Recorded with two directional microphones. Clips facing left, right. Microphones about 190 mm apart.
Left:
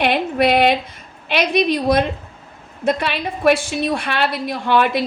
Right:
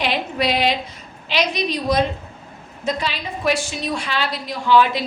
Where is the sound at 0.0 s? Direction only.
55° left (ahead or behind).